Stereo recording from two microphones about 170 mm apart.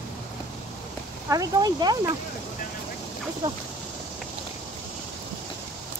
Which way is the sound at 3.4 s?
25° right (ahead or behind).